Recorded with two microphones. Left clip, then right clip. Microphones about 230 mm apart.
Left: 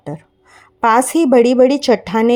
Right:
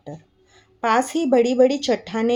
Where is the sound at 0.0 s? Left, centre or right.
Left.